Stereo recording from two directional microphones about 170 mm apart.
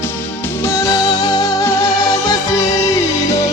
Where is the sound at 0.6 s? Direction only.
15° left (ahead or behind).